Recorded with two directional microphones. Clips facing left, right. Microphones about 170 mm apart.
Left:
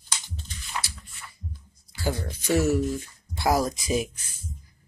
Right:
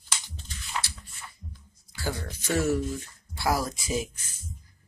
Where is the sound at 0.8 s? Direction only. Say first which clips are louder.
Left 1 dB; 10° left (ahead or behind).